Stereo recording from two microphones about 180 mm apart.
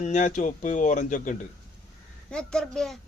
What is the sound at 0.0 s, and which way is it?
Speech, 40° left (ahead or behind).